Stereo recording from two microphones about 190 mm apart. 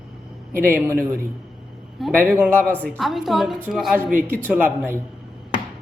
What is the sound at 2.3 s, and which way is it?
Speech, 10° right (ahead or behind).